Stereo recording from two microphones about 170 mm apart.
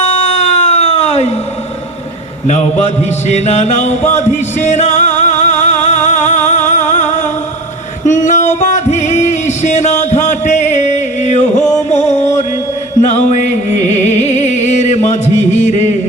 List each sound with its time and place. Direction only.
0.0 s cat: 40° left (ahead or behind)
3.2 s music: 40° left (ahead or behind)